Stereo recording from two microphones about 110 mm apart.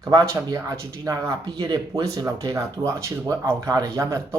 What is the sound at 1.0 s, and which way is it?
Speech, 30° right (ahead or behind).